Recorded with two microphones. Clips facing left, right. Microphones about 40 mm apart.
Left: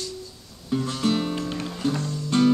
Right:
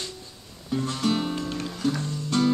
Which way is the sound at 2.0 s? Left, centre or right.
Centre.